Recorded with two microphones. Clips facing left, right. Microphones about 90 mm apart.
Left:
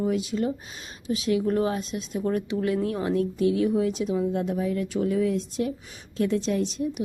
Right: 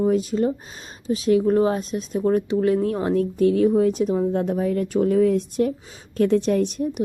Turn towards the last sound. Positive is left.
turn(degrees=-55)  # may be behind; listen again after turning